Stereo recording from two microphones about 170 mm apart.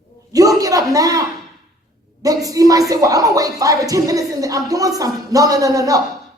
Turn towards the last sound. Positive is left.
turn(degrees=-20)  # may be behind; listen again after turning